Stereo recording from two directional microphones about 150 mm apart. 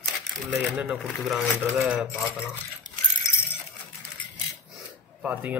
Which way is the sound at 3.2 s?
20° left (ahead or behind).